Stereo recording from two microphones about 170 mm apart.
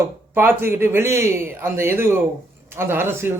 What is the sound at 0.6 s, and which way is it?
A man's voice, 15° right (ahead or behind).